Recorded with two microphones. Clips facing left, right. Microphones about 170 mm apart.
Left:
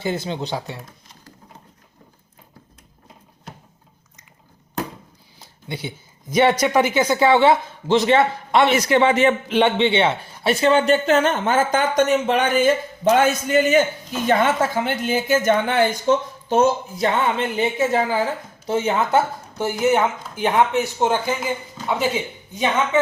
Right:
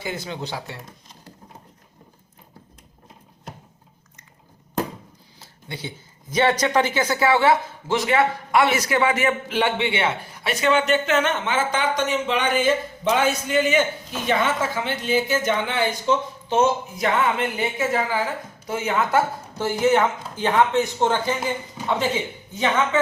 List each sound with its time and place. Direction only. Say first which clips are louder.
0.0 s a man's voice: left 5 dB; 25° left (ahead or behind)
5.4 s a sound: left 4 dB; 15° left (ahead or behind)
6.3 s a man's voice: left 3 dB; 10° left (ahead or behind)